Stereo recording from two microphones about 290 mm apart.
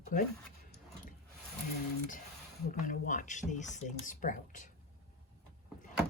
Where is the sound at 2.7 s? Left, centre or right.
Left.